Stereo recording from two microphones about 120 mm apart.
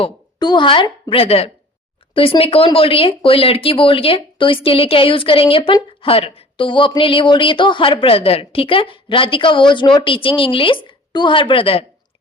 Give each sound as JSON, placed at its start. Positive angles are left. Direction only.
{"t": 0.3, "sound": "a woman's voice", "side_deg": 40}